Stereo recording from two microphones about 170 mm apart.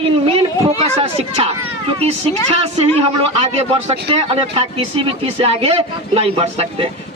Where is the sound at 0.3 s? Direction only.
35° right (ahead or behind).